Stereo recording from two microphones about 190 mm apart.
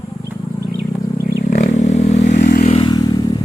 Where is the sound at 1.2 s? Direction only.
40° left (ahead or behind).